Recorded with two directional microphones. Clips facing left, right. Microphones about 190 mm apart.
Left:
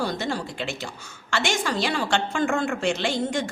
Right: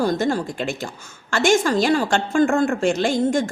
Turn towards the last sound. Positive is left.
turn(degrees=-45)  # may be behind; listen again after turning